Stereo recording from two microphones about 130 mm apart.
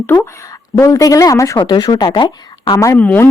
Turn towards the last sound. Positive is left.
turn(degrees=10)  # may be behind; listen again after turning